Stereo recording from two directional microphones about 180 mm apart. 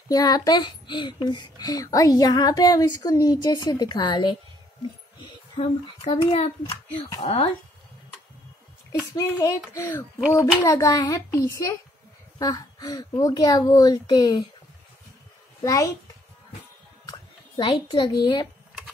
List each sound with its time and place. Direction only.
0.1 s a child's voice: 20° left (ahead or behind)
5.6 s a child's voice: 25° left (ahead or behind)
9.1 s a child's voice: 20° left (ahead or behind)
15.6 s a child's voice: 15° left (ahead or behind)
17.0 s a child's voice: 25° left (ahead or behind)